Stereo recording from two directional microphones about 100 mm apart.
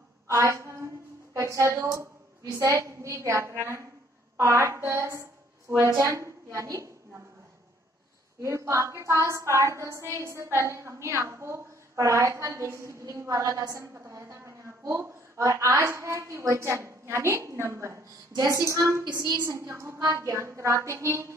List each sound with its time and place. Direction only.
0.3 s a woman's voice: 30° right (ahead or behind)
8.4 s a woman's voice: 30° right (ahead or behind)